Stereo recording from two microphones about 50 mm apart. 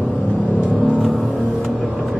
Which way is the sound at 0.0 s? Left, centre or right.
Left.